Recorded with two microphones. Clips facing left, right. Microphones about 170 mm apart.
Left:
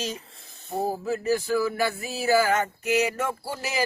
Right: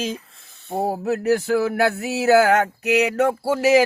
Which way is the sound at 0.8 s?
65° right (ahead or behind).